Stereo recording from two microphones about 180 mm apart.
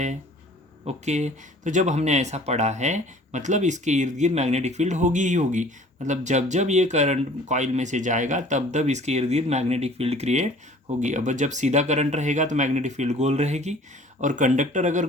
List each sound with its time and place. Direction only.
0.9 s speech: 40° right (ahead or behind)